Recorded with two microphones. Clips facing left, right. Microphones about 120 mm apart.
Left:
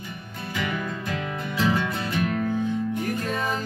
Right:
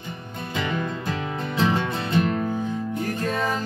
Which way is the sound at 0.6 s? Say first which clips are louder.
Right 2 dB; 30° right (ahead or behind).